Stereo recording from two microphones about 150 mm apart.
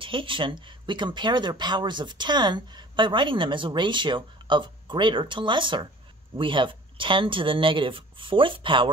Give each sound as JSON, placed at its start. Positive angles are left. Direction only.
{"t": 0.0, "sound": "speech", "side_deg": -35}